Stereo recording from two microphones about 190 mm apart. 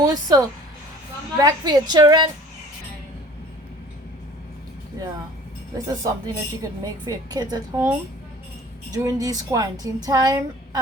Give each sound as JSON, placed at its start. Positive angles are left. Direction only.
{"t": 0.0, "sound": "speech", "side_deg": -20}
{"t": 5.7, "sound": "speech", "side_deg": -20}